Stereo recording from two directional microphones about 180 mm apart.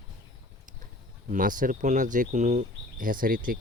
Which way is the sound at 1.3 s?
50° right (ahead or behind).